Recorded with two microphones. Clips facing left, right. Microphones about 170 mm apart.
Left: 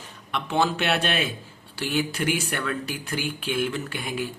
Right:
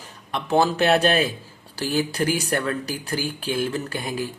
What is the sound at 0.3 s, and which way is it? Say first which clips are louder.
Speech: right 4 dB; 40° right (ahead or behind).